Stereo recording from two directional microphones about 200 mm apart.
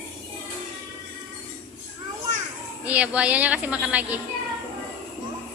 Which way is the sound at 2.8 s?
5° right (ahead or behind).